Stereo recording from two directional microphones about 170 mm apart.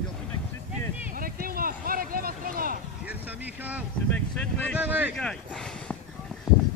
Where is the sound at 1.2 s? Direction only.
60° right (ahead or behind).